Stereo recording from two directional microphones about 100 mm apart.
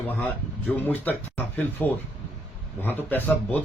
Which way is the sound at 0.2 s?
15° left (ahead or behind).